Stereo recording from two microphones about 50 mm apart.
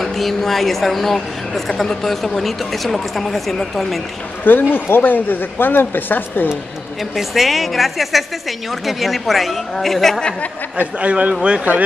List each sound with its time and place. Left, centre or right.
0.0 s a woman's voice: centre
4.5 s speech: left
7.2 s a woman's voice: centre
10.8 s a man's voice: right